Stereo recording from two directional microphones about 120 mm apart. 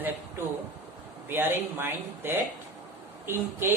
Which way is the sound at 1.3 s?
15° right (ahead or behind).